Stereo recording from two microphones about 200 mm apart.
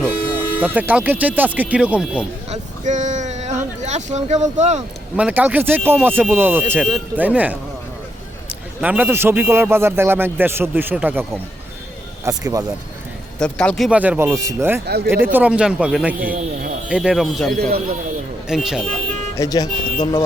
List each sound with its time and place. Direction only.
0.6 s a man's voice: 10° right (ahead or behind)
2.5 s a sound: 35° right (ahead or behind)
5.1 s a man's voice: 5° right (ahead or behind)
8.8 s a man's voice: 5° right (ahead or behind)
13.4 s a man's voice: 5° left (ahead or behind); by 14.8 s 10° right (ahead or behind)
14.8 s speech: 55° right (ahead or behind)
15.1 s a man's voice: 10° right (ahead or behind)
16.2 s speech: 40° right (ahead or behind)
16.9 s a man's voice: centre (ahead or behind)
19.4 s speech: 20° left (ahead or behind)